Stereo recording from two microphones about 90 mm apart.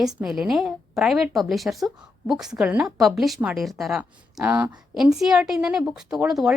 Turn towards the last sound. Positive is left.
turn(degrees=-5)  # may be behind; listen again after turning